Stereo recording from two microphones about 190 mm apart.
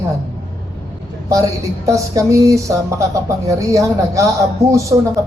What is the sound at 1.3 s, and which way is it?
Speech, 15° right (ahead or behind).